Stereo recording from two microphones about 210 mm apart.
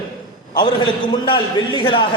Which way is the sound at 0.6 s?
20° left (ahead or behind).